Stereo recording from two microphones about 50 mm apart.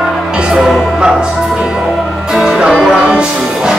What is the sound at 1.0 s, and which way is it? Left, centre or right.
Music, centre.